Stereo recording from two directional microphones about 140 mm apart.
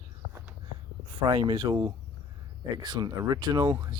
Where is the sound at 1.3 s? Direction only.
30° right (ahead or behind).